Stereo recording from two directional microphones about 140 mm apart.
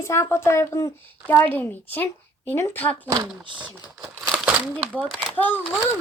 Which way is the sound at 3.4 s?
35° right (ahead or behind).